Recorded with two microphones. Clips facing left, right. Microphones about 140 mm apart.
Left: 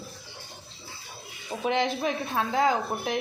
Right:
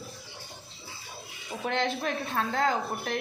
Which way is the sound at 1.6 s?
10° left (ahead or behind).